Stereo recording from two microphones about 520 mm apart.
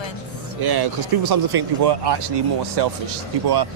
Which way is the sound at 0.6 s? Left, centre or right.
Right.